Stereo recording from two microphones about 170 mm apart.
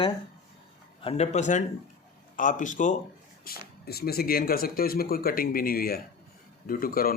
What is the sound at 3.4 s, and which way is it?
Speech, 65° left (ahead or behind).